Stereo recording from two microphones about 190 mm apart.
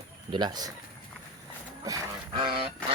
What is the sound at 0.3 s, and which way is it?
Speech, 25° right (ahead or behind).